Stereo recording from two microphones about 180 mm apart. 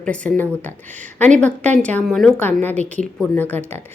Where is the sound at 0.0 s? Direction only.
5° left (ahead or behind).